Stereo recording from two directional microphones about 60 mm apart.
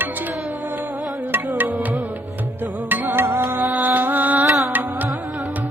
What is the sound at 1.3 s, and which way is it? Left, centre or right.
Music, right.